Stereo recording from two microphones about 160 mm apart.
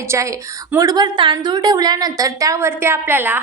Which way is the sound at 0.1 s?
20° right (ahead or behind).